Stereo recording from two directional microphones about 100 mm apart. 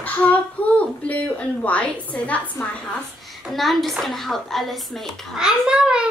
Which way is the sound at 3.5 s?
Centre (ahead or behind).